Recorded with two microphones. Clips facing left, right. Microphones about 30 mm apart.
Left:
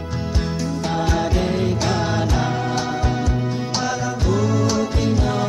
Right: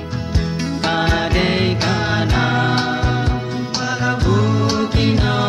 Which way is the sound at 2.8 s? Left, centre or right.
Right.